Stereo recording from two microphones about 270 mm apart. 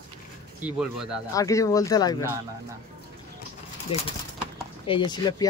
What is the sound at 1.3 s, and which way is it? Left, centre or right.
Speech, centre.